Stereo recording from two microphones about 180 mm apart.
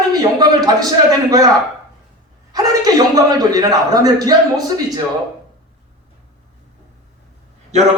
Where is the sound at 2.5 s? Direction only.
20° right (ahead or behind).